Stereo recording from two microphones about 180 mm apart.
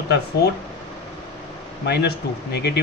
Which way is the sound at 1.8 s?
70° left (ahead or behind).